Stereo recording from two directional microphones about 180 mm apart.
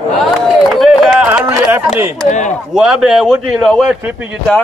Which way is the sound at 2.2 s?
40° left (ahead or behind).